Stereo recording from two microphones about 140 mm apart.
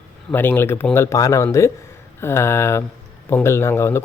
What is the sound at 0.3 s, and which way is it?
Speech, 15° left (ahead or behind).